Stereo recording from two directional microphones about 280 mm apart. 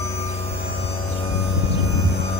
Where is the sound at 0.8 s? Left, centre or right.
Left.